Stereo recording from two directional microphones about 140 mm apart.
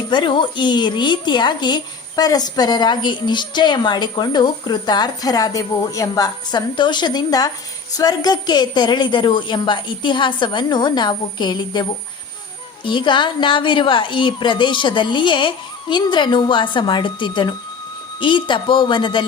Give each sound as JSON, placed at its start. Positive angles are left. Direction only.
{"t": 0.1, "sound": "a woman's voice", "side_deg": 35}